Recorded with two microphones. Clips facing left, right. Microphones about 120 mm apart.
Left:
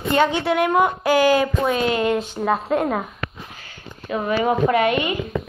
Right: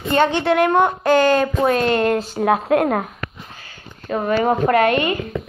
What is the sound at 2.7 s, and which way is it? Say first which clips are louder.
Speech: right 4 dB; 60° right (ahead or behind).